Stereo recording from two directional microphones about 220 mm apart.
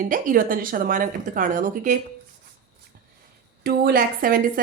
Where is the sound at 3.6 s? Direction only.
45° right (ahead or behind).